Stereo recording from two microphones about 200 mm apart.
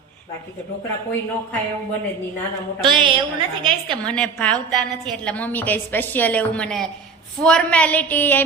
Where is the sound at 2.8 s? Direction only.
25° right (ahead or behind).